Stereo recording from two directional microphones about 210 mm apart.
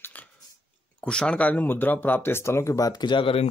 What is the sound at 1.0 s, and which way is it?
Speech, 5° left (ahead or behind).